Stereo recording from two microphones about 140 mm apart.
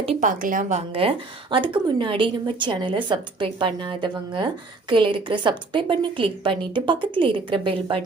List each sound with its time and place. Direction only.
0.2 s a woman's voice: 70° right (ahead or behind)
0.8 s a woman's voice: 40° right (ahead or behind)